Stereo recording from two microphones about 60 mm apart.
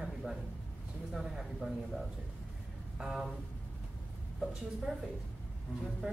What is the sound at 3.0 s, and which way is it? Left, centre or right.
Speech, centre.